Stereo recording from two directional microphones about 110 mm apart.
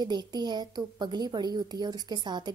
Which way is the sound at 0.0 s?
40° right (ahead or behind).